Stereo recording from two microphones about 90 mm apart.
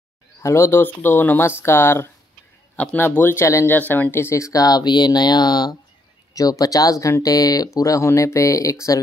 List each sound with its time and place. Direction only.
0.4 s speech: 30° left (ahead or behind)